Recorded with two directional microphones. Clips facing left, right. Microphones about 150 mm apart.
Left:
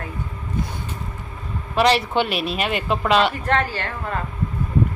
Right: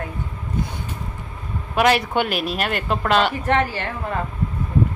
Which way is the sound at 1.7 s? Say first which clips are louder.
Even; 5° right (ahead or behind).